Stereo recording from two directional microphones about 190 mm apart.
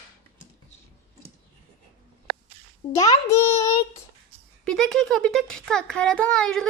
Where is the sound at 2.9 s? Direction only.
15° left (ahead or behind).